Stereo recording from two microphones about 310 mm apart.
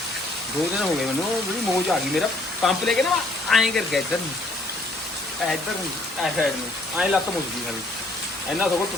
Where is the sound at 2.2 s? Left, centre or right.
Centre.